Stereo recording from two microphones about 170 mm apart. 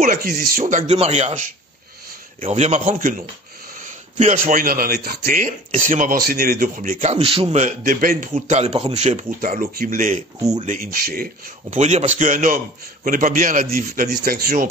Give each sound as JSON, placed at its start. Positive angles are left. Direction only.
{"t": 0.0, "sound": "speech", "side_deg": -60}
{"t": 0.9, "sound": "a man's voice", "side_deg": -40}
{"t": 2.4, "sound": "speech", "side_deg": -40}
{"t": 7.2, "sound": "a man's voice", "side_deg": -30}
{"t": 7.5, "sound": "speech", "side_deg": -50}
{"t": 11.7, "sound": "speech", "side_deg": -40}